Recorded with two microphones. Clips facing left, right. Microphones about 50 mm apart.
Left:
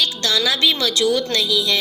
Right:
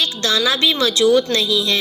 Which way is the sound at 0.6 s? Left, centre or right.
Right.